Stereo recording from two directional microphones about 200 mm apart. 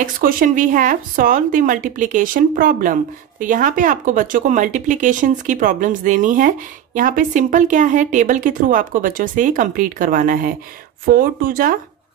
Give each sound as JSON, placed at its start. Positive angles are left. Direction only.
{"t": 0.0, "sound": "speech", "side_deg": -45}